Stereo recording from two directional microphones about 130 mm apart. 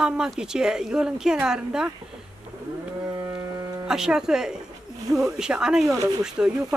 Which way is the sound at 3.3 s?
25° right (ahead or behind).